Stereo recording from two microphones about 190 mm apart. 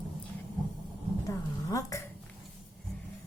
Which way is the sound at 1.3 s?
15° left (ahead or behind).